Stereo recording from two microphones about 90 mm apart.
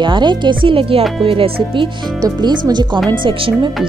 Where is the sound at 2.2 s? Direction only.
50° right (ahead or behind).